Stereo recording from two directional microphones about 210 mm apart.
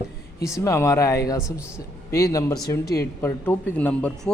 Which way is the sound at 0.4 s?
15° left (ahead or behind).